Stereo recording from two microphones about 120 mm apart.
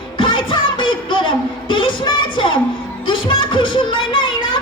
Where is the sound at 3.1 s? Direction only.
45° left (ahead or behind).